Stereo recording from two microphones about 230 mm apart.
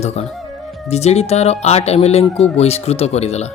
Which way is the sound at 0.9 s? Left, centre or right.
Left.